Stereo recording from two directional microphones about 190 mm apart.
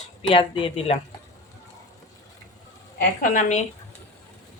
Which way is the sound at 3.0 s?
40° left (ahead or behind).